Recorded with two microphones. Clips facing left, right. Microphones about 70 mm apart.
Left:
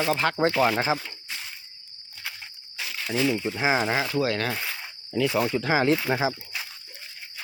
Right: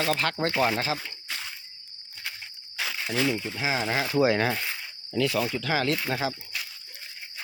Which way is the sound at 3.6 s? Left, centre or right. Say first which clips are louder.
Left 4 dB; left.